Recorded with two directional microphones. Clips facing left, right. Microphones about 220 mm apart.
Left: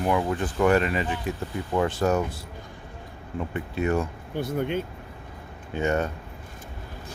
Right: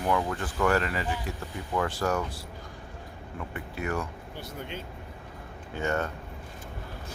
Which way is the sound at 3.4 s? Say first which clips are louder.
Left 7 dB; 25° left (ahead or behind).